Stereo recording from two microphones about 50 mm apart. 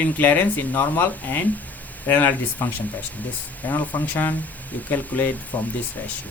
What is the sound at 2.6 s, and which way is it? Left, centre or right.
Speech, left.